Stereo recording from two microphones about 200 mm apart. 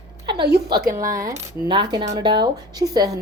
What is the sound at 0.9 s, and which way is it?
A woman's voice, 15° right (ahead or behind).